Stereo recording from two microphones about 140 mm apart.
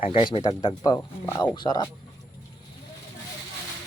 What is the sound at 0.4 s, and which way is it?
Speech, 30° left (ahead or behind).